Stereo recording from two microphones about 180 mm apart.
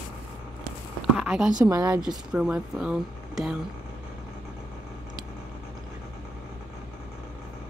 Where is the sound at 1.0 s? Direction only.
Centre (ahead or behind).